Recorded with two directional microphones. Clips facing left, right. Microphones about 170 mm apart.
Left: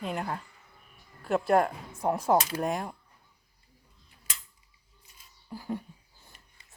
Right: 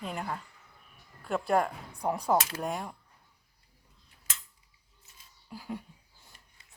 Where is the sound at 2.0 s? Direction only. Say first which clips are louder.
Left 3 dB; 5° left (ahead or behind).